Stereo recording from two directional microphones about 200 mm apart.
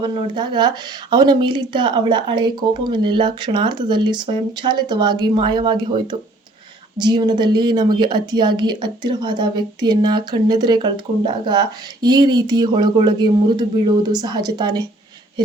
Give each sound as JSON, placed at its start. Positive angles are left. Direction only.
{"t": 0.0, "sound": "a woman's voice", "side_deg": -25}